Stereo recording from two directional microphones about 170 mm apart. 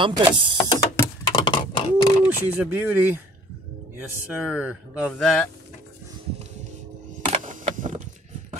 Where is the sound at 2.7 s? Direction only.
10° right (ahead or behind).